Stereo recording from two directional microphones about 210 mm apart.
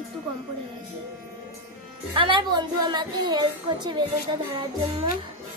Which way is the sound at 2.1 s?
25° right (ahead or behind).